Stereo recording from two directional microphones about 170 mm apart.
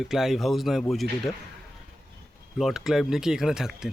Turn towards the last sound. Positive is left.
turn(degrees=-5)  # may be behind; listen again after turning